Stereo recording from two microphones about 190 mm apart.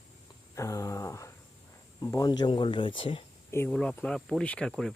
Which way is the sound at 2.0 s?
20° left (ahead or behind).